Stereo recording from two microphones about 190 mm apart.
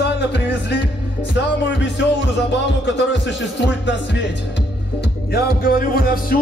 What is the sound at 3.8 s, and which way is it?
Speech, 65° left (ahead or behind).